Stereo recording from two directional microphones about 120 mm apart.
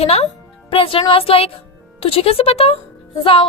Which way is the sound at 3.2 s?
45° left (ahead or behind).